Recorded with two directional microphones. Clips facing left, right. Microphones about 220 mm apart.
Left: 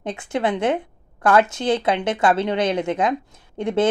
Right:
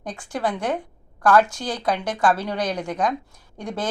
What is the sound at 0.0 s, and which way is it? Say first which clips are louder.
Speech: left 4 dB; 25° left (ahead or behind).